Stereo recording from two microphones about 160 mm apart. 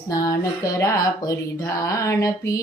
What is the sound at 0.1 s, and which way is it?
Speech, 20° left (ahead or behind).